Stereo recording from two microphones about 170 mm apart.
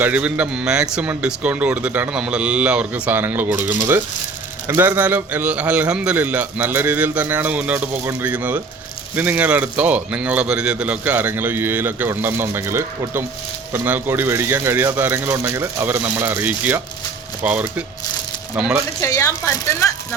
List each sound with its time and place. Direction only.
0.0 s a man's voice: 10° right (ahead or behind)
18.9 s a woman's voice: 20° left (ahead or behind)